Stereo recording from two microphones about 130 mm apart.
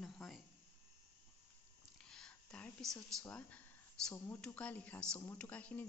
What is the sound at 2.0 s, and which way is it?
Speech, 5° left (ahead or behind).